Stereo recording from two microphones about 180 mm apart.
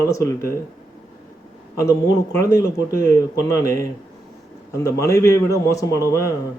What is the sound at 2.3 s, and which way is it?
Speech, 15° left (ahead or behind).